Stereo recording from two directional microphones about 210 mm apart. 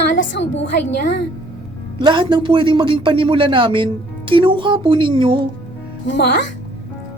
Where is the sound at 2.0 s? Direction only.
25° right (ahead or behind).